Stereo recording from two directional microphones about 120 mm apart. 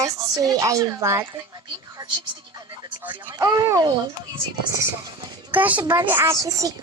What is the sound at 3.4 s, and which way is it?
Speech, 30° right (ahead or behind).